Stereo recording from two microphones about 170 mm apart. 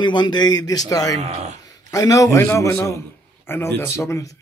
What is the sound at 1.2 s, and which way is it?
Speech, 40° right (ahead or behind).